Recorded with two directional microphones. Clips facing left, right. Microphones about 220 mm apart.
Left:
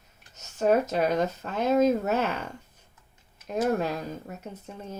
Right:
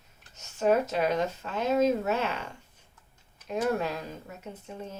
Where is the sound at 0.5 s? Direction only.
40° left (ahead or behind).